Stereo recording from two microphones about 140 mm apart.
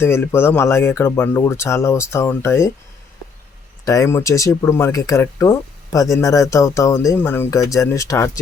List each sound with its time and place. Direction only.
0.0 s speech: 20° left (ahead or behind)
3.8 s speech: 20° left (ahead or behind)